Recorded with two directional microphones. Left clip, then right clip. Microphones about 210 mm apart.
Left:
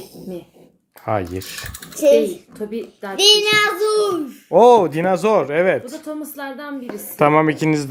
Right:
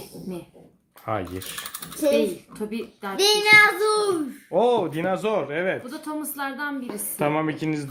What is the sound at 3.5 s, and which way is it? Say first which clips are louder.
Speech: even; 5° right (ahead or behind).